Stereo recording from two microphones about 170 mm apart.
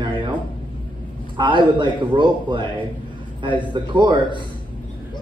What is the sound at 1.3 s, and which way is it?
A man's voice, 30° right (ahead or behind).